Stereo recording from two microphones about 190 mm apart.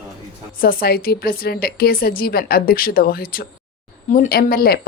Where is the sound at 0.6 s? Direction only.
50° left (ahead or behind).